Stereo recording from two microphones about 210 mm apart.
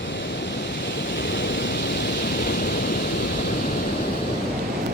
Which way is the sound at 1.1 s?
60° left (ahead or behind).